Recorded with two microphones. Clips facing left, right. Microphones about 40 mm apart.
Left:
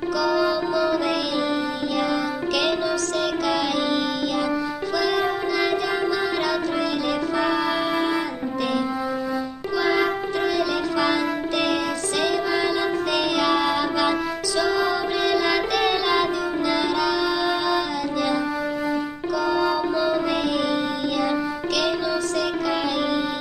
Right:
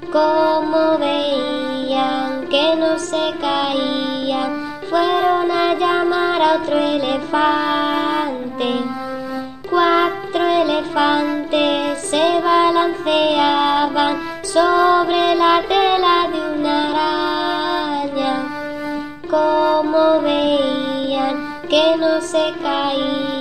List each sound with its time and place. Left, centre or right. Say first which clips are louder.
0.1 s music: right 8 dB; right
1.0 s music: right 5 dB; right
5.5 s music: right 6 dB; right
10.0 s music: right 5 dB; right
14.5 s child singing: right 10 dB; right; by 17.7 s centre
19.3 s music: right 8 dB; right
21.7 s music: right 11 dB; right